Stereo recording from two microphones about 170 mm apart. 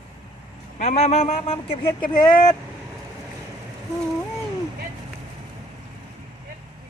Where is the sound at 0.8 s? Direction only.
40° left (ahead or behind); by 2.6 s 25° left (ahead or behind).